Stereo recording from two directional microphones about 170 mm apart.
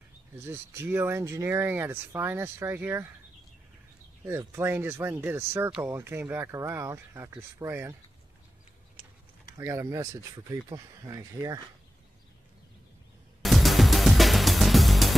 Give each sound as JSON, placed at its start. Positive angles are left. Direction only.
{"t": 0.4, "sound": "speech", "side_deg": -15}
{"t": 4.3, "sound": "speech", "side_deg": -15}
{"t": 9.6, "sound": "speech", "side_deg": -15}
{"t": 13.4, "sound": "music", "side_deg": 0}